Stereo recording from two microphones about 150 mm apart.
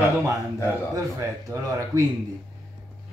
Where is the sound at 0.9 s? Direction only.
20° right (ahead or behind).